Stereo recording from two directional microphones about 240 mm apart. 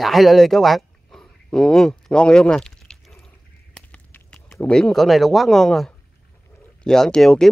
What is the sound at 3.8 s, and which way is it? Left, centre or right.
Speech, centre.